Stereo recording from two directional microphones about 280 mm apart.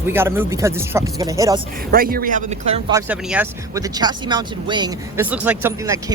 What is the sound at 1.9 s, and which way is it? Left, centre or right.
Speech, right.